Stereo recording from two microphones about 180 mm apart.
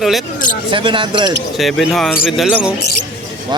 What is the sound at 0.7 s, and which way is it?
Speech, 30° right (ahead or behind).